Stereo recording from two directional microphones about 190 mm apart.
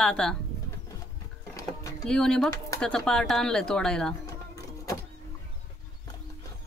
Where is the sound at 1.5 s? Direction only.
15° left (ahead or behind).